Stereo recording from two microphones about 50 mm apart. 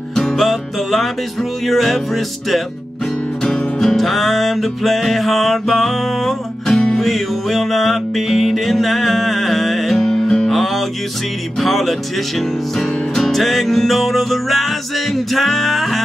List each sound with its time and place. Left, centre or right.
0.1 s music: centre
3.4 s music: centre
6.7 s music: centre
7.0 s music: centre
11.6 s music: centre